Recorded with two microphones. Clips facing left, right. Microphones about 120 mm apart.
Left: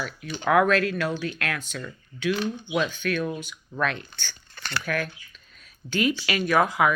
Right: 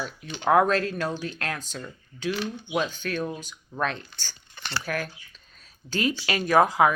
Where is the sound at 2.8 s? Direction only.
35° right (ahead or behind).